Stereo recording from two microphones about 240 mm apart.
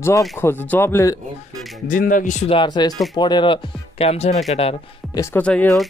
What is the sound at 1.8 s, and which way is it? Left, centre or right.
Speech, left.